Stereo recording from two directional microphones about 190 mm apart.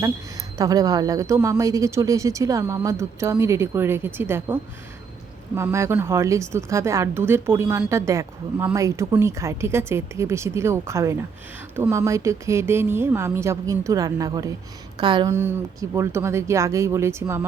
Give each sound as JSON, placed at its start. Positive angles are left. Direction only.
{"t": 0.6, "sound": "a woman's voice", "side_deg": -20}